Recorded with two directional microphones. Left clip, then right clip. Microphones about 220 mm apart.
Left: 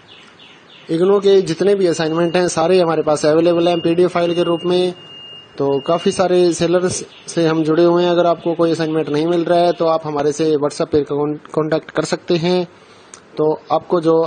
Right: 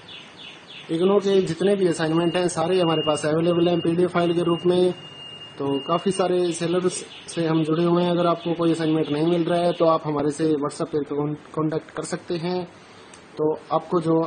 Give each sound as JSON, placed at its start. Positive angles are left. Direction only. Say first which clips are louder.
{"t": 0.9, "sound": "a man's voice", "louder": "left 7 dB", "side_deg": 30}
{"t": 13.7, "sound": "a man's voice", "louder": "left 7 dB", "side_deg": 30}